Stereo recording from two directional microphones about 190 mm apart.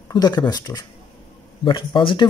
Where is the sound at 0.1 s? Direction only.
20° left (ahead or behind).